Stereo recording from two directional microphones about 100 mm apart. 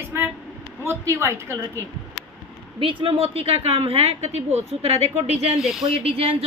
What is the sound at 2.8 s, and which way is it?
A woman's voice, 70° right (ahead or behind).